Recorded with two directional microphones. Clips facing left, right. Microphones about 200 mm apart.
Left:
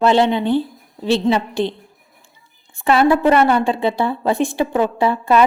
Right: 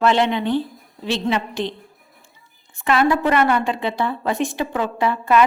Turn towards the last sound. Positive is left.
turn(degrees=30)  # may be behind; listen again after turning